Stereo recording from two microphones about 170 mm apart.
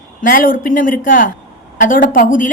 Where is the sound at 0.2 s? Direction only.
55° left (ahead or behind).